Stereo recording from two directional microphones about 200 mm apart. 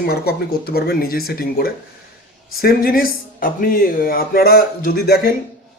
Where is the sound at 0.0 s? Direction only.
50° left (ahead or behind).